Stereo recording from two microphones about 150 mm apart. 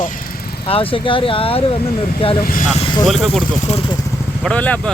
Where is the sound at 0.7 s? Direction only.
35° left (ahead or behind).